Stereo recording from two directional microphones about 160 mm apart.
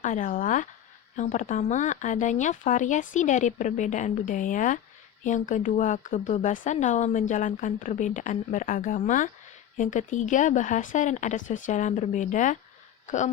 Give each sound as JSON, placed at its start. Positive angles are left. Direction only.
{"t": 0.0, "sound": "speech", "side_deg": 55}